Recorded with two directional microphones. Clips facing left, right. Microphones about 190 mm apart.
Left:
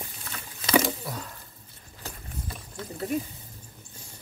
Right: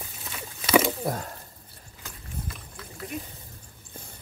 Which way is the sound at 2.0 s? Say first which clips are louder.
Even; 30° left (ahead or behind).